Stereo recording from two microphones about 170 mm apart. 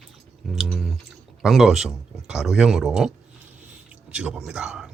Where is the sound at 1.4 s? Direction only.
Centre (ahead or behind).